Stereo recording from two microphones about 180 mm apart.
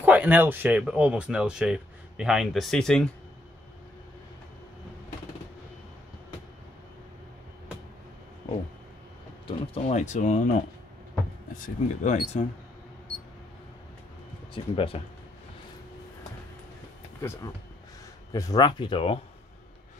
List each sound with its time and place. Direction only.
0.0 s speech: 10° right (ahead or behind)
9.5 s speech: 35° left (ahead or behind)
11.5 s speech: 45° left (ahead or behind)
14.5 s speech: 30° left (ahead or behind)
17.2 s speech: 15° left (ahead or behind); by 19.1 s 30° left (ahead or behind)